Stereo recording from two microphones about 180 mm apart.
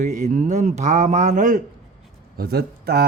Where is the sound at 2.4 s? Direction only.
60° right (ahead or behind).